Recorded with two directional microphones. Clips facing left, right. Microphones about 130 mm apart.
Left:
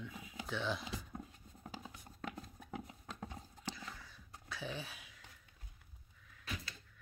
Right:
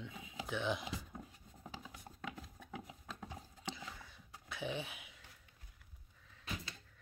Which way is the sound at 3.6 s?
20° right (ahead or behind).